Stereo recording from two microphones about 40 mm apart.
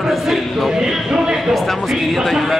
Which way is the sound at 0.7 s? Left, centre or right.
Centre.